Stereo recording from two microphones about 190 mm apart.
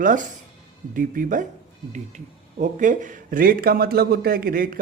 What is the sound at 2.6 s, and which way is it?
A man's voice, 40° right (ahead or behind).